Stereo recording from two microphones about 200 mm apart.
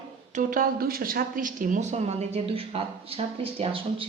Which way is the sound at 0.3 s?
45° right (ahead or behind).